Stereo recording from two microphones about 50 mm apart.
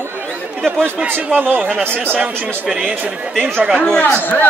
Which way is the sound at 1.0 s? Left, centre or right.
Right.